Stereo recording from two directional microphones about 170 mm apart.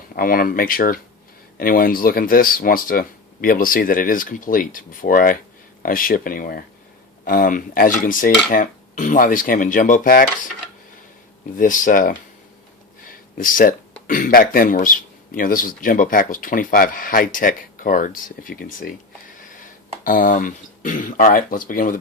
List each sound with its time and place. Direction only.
0.2 s speech: 60° left (ahead or behind)
11.5 s speech: 50° left (ahead or behind)
13.1 s a sound: 55° left (ahead or behind)
14.1 s speech: 55° left (ahead or behind)